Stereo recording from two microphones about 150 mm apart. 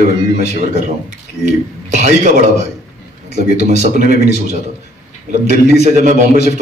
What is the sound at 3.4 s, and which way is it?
A man's voice, 50° right (ahead or behind).